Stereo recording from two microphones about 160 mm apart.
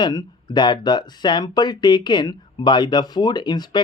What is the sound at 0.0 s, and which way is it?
Speech, 25° left (ahead or behind).